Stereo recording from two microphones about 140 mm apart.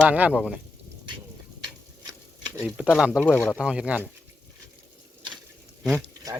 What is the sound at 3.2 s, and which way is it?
Speech, 15° left (ahead or behind).